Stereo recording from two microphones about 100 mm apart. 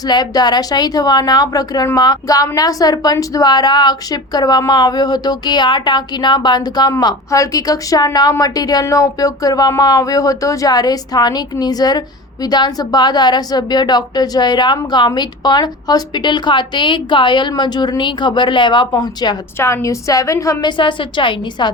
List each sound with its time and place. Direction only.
0.0 s a woman's voice: 45° left (ahead or behind)
19.5 s a woman's voice: 30° left (ahead or behind)
20.7 s a woman's voice: 55° left (ahead or behind)